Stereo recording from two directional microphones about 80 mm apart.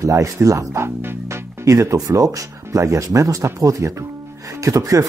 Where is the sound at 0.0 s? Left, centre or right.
Right.